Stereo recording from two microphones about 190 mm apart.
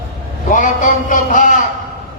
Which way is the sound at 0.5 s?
45° left (ahead or behind).